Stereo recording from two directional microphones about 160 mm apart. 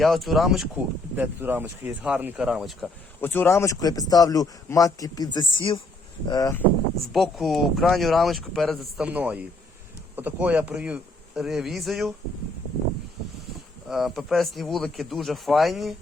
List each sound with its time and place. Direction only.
0.0 s speech: centre (ahead or behind)
1.1 s speech: 10° right (ahead or behind)
3.2 s a man's voice: 15° left (ahead or behind)
7.1 s speech: centre (ahead or behind)
9.0 s speech: 10° right (ahead or behind)
13.8 s speech: centre (ahead or behind)